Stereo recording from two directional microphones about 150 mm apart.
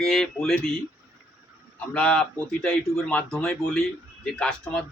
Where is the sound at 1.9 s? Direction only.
5° left (ahead or behind).